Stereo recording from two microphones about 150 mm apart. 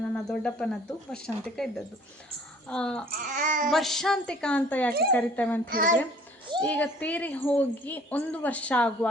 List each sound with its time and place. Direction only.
0.1 s a woman's voice: 5° left (ahead or behind)
3.2 s a child's voice: 60° right (ahead or behind)
3.7 s a woman's voice: centre (ahead or behind)
5.6 s a child's voice: 70° right (ahead or behind)
6.7 s a woman's voice: 10° left (ahead or behind)